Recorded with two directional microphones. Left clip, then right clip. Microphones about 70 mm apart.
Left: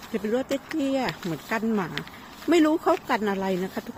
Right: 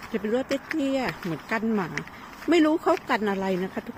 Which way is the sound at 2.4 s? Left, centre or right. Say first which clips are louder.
Even; left.